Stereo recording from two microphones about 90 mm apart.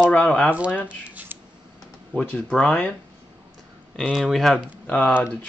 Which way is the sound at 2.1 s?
10° left (ahead or behind).